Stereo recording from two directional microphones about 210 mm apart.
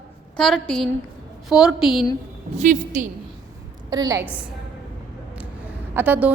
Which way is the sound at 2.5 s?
35° right (ahead or behind).